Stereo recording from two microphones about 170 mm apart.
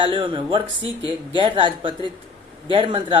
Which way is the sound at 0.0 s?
30° right (ahead or behind).